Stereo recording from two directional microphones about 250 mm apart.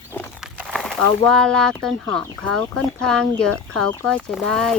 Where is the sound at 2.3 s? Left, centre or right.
Right.